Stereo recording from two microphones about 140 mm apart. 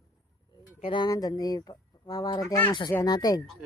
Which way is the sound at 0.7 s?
40° left (ahead or behind).